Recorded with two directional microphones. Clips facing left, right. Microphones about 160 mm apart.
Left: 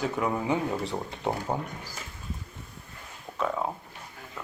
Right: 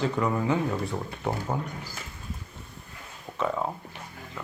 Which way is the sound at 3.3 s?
Centre (ahead or behind).